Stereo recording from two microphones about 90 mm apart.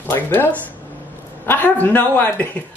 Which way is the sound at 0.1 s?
20° left (ahead or behind).